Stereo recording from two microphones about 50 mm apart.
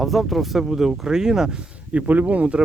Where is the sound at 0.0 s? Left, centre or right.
Centre.